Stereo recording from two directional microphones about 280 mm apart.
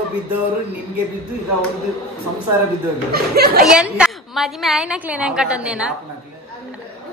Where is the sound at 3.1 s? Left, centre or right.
Right.